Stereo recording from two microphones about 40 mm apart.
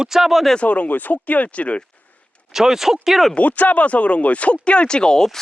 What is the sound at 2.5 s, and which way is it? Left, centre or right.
Speech, centre.